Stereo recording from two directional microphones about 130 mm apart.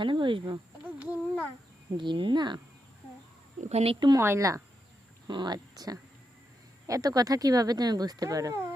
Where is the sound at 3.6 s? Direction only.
55° right (ahead or behind).